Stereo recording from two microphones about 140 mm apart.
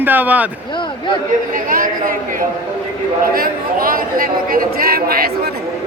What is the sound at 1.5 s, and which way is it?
Speech, 90° right.